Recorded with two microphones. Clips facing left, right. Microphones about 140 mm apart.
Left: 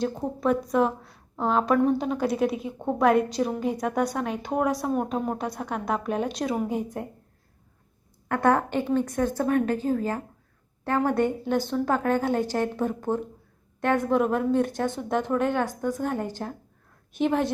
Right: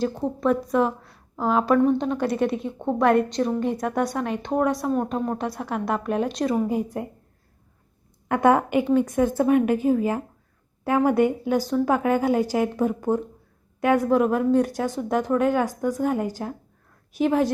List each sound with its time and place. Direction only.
0.2 s speech: centre (ahead or behind)
8.3 s a woman's voice: 15° right (ahead or behind)